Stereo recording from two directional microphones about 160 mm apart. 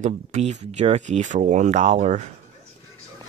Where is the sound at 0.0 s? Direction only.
45° right (ahead or behind).